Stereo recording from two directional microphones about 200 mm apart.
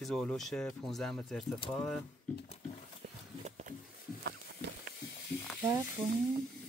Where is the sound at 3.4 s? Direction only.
35° right (ahead or behind).